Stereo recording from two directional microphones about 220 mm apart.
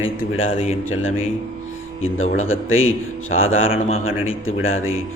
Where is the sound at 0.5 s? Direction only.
25° left (ahead or behind).